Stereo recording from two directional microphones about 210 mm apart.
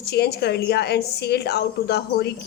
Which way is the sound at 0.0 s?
50° left (ahead or behind).